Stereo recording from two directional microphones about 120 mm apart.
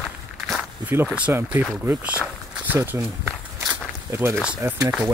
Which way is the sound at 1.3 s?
15° right (ahead or behind).